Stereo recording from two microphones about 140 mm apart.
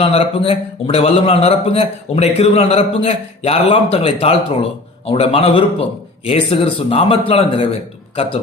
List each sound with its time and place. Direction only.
0.0 s a man's voice: 45° left (ahead or behind)